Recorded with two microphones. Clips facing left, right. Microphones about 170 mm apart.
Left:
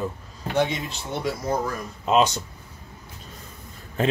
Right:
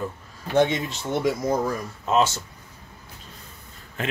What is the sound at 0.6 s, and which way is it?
Speech, 20° right (ahead or behind).